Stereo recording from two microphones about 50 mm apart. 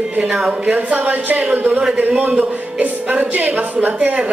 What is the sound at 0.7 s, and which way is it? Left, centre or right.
A woman's voice, right.